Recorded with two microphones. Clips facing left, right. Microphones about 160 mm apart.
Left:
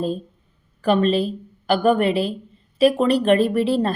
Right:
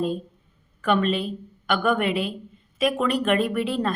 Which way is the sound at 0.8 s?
35° left (ahead or behind).